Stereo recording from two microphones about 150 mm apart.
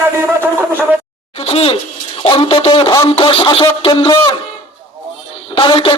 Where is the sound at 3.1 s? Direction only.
35° left (ahead or behind).